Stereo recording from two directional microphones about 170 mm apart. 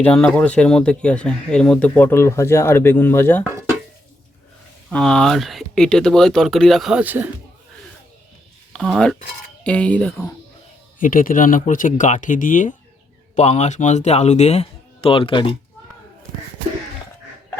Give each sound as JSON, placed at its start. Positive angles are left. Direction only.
{"t": 0.0, "sound": "speech", "side_deg": 5}
{"t": 4.9, "sound": "speech", "side_deg": 5}
{"t": 8.7, "sound": "speech", "side_deg": 0}
{"t": 11.0, "sound": "speech", "side_deg": 55}